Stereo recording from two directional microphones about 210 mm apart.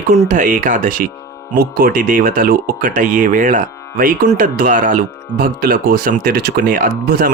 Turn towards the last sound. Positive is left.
turn(degrees=-45)  # may be behind; listen again after turning